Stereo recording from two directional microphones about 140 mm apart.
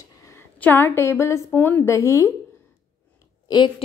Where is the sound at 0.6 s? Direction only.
15° left (ahead or behind).